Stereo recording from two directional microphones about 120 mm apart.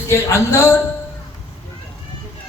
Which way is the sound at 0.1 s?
25° left (ahead or behind).